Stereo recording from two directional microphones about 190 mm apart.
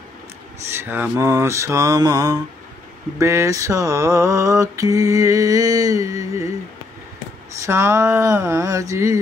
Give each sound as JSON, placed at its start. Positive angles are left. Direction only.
{"t": 0.7, "sound": "mantra", "side_deg": -10}
{"t": 7.6, "sound": "mantra", "side_deg": -15}